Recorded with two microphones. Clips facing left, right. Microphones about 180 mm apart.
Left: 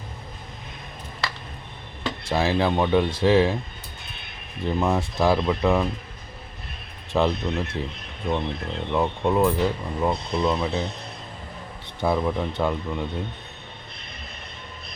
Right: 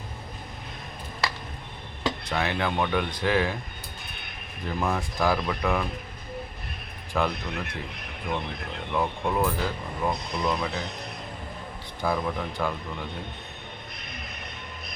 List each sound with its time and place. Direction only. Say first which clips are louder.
2.2 s speech: left 8 dB; 25° left (ahead or behind)
4.6 s speech: left 5 dB; 25° left (ahead or behind)
7.1 s speech: left 5 dB; 25° left (ahead or behind)
11.9 s speech: left 5 dB; 25° left (ahead or behind)